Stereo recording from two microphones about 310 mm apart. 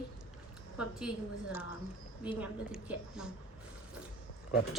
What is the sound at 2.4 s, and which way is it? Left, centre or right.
Speech, centre.